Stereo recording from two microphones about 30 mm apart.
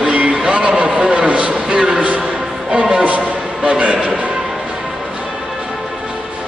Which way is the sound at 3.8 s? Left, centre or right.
Right.